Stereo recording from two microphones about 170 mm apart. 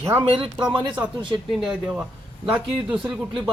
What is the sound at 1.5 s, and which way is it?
Speech, 5° right (ahead or behind).